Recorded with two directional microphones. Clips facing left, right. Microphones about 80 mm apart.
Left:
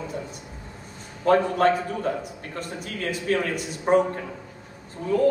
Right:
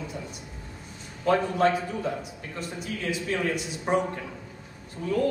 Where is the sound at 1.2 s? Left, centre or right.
Left.